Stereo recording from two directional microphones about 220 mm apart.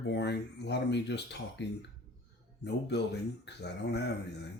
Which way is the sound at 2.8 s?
50° left (ahead or behind).